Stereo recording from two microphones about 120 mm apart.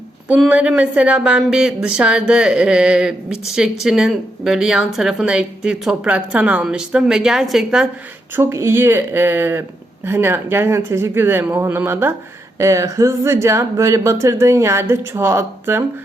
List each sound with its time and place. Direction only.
0.3 s speech: 5° right (ahead or behind)
8.4 s speech: 25° right (ahead or behind)